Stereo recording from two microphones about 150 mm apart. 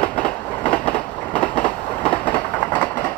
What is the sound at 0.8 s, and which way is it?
Train, 10° left (ahead or behind).